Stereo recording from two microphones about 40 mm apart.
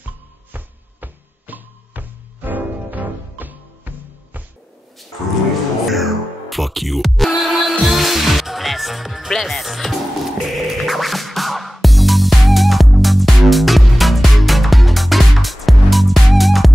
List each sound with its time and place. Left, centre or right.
0.5 s music: right
5.9 s music: centre